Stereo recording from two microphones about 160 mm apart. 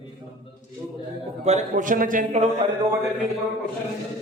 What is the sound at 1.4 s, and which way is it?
Speech, 45° right (ahead or behind).